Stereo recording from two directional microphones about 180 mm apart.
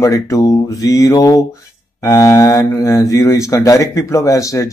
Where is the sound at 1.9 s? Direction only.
15° left (ahead or behind).